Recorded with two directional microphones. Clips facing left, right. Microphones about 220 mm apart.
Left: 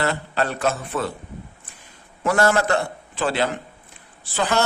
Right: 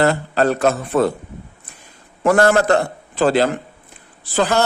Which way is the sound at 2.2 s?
50° right (ahead or behind).